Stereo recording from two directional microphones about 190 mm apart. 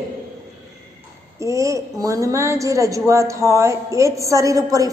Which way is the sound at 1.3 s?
15° right (ahead or behind).